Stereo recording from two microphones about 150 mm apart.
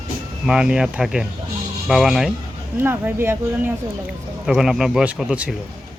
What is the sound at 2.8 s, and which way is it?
Speech, 15° right (ahead or behind).